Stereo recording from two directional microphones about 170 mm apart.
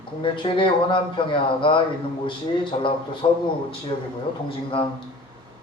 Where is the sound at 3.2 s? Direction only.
25° left (ahead or behind).